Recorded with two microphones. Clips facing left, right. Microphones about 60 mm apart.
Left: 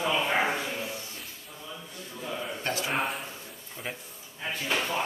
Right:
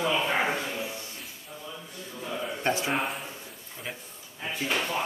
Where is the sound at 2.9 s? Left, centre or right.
Centre.